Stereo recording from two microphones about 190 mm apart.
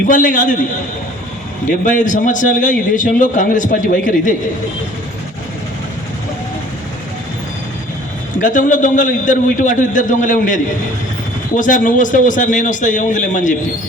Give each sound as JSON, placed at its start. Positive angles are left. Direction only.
{"t": 0.1, "sound": "a man's voice", "side_deg": 45}
{"t": 1.8, "sound": "a man's voice", "side_deg": 40}
{"t": 8.4, "sound": "a man's voice", "side_deg": 45}